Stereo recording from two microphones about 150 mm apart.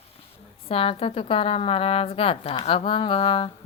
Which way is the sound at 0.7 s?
40° left (ahead or behind).